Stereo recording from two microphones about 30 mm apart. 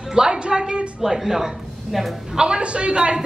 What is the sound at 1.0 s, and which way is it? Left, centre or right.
Speech, centre.